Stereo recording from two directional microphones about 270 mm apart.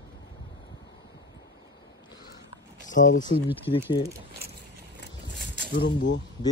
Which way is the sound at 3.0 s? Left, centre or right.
Left.